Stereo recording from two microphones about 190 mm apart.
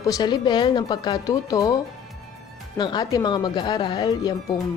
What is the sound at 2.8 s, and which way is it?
Speech, 20° left (ahead or behind).